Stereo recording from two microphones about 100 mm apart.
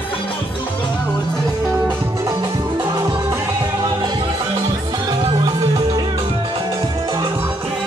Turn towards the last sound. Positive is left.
turn(degrees=-40)  # may be behind; listen again after turning